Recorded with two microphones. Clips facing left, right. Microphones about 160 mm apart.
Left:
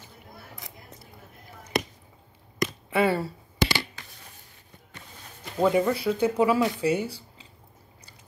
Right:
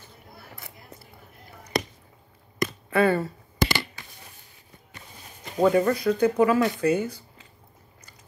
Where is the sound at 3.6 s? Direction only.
50° right (ahead or behind).